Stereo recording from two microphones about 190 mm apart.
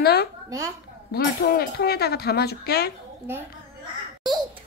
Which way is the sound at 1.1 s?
55° left (ahead or behind).